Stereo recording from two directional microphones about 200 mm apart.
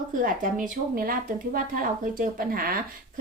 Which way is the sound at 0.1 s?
45° right (ahead or behind).